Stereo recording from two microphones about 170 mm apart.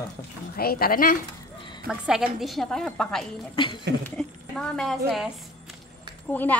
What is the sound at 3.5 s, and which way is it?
Speech, 30° left (ahead or behind).